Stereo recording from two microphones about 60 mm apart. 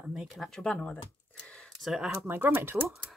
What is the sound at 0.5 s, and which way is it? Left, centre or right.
Speech, centre.